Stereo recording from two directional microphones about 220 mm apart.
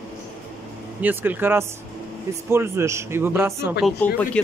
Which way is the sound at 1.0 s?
10° right (ahead or behind).